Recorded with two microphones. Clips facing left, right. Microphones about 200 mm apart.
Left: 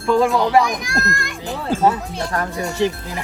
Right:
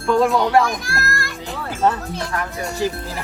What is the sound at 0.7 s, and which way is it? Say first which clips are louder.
Speech: left 2 dB; 20° left (ahead or behind).